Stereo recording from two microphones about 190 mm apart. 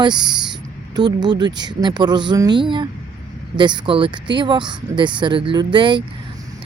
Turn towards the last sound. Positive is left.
turn(degrees=-25)  # may be behind; listen again after turning